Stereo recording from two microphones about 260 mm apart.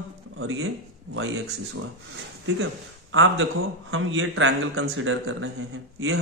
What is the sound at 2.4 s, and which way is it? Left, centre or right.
A man's voice, right.